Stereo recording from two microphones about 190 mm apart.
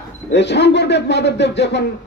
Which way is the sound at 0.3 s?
65° left (ahead or behind).